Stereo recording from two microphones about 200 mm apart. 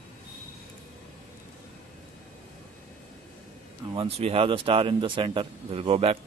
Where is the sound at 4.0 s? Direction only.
30° right (ahead or behind).